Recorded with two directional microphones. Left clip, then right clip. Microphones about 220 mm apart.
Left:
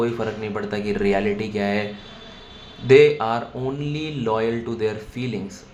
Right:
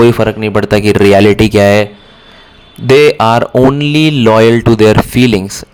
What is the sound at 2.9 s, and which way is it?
Speech, 50° right (ahead or behind).